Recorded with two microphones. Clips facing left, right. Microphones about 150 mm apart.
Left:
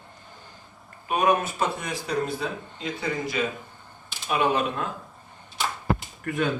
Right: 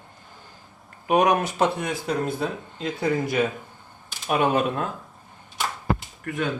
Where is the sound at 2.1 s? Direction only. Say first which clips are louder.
Right 1 dB; 50° right (ahead or behind).